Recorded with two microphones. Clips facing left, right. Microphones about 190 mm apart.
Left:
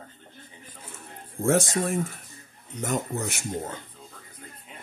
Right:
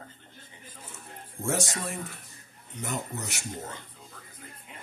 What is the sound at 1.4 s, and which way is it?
Speech, 55° left (ahead or behind).